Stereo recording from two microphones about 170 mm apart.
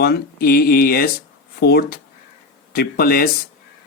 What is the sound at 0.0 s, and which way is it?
Speech, 65° left (ahead or behind).